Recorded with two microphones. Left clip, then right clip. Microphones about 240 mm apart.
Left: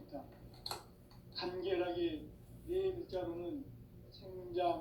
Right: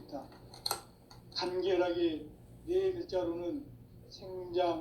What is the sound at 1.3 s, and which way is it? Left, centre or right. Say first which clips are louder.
Tick-tock: right 6 dB; right.